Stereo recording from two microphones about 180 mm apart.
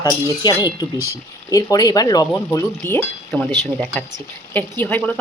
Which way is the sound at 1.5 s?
20° left (ahead or behind).